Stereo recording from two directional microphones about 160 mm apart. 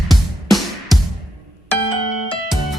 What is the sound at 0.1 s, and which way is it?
Music, centre (ahead or behind).